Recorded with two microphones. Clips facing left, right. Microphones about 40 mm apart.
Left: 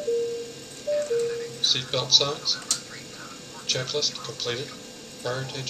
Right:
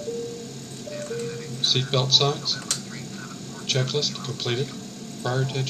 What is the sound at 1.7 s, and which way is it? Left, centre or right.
Speech, centre.